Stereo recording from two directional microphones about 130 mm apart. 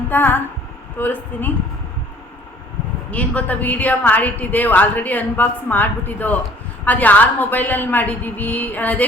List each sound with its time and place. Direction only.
0.1 s a woman's voice: 15° left (ahead or behind)
3.1 s a woman's voice: 10° left (ahead or behind)